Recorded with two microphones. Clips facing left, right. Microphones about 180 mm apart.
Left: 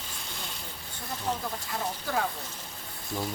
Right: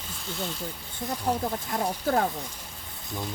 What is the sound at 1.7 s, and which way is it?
Speech, 45° right (ahead or behind).